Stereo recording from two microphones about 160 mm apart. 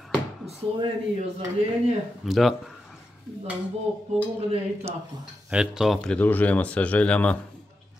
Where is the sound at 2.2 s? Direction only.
Centre (ahead or behind).